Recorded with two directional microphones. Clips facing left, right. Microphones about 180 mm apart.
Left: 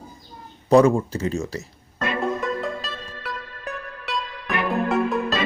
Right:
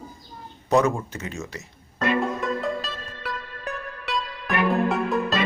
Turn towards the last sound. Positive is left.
turn(degrees=0)  # may be behind; listen again after turning